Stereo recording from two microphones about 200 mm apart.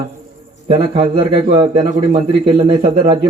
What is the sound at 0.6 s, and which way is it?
A man's voice, 25° right (ahead or behind).